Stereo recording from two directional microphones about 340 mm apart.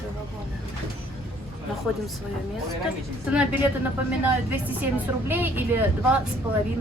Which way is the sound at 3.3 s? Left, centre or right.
Centre.